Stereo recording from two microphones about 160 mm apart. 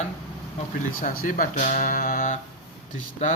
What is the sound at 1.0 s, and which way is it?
Speech, 60° left (ahead or behind).